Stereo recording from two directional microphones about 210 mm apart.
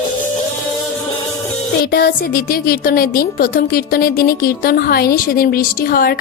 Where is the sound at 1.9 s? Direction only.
50° left (ahead or behind).